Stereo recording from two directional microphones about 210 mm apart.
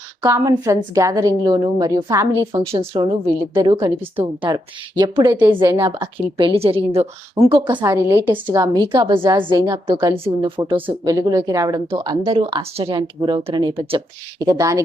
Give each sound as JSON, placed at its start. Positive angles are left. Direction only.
{"t": 0.2, "sound": "a woman's voice", "side_deg": -15}